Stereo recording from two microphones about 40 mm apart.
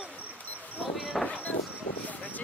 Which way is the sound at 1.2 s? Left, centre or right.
Left.